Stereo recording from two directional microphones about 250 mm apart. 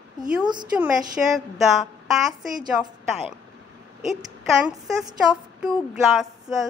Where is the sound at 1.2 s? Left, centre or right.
Centre.